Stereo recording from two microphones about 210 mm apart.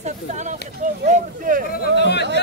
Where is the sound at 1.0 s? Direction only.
40° right (ahead or behind).